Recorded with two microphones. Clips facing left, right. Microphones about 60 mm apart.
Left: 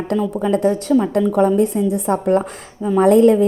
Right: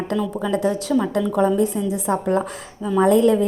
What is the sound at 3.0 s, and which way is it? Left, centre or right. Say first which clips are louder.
Speech: left 4 dB; left.